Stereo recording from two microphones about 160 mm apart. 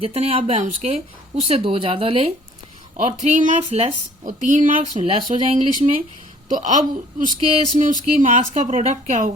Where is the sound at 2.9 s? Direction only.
50° right (ahead or behind).